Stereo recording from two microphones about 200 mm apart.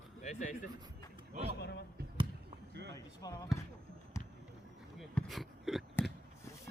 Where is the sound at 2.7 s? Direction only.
60° right (ahead or behind).